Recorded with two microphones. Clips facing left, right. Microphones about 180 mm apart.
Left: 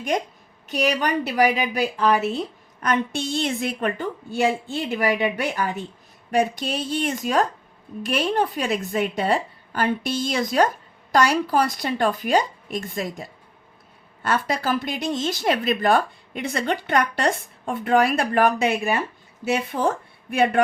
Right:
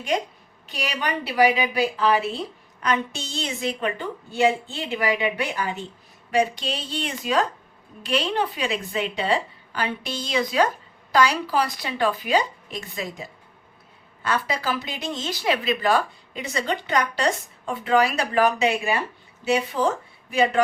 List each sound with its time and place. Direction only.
1.2 s a woman's voice: centre (ahead or behind)
2.0 s a woman's voice: 45° left (ahead or behind)